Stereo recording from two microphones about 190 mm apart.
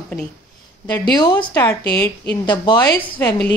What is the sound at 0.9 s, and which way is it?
A woman's voice, 20° left (ahead or behind).